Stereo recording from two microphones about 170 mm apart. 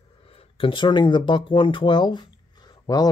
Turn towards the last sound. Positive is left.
turn(degrees=25)  # may be behind; listen again after turning